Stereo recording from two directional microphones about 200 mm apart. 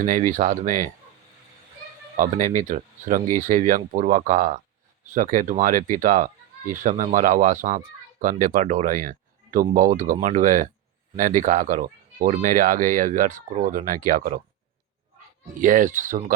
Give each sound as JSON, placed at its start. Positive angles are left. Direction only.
{"t": 0.0, "sound": "speech", "side_deg": -40}
{"t": 2.1, "sound": "speech", "side_deg": -40}
{"t": 15.6, "sound": "speech", "side_deg": -40}